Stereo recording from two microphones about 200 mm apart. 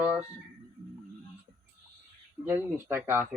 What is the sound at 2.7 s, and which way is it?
Speech, 10° right (ahead or behind).